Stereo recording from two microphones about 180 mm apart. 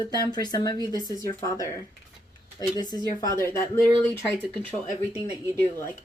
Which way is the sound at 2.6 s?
20° left (ahead or behind).